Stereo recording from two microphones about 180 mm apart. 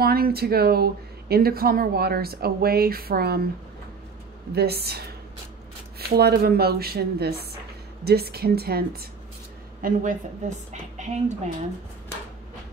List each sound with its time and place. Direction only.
0.0 s speech: 60° right (ahead or behind)
4.5 s a woman's voice: 65° right (ahead or behind); by 11.5 s 40° right (ahead or behind)